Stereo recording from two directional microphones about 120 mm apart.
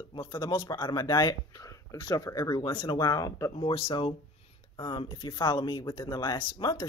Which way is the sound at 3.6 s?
50° left (ahead or behind).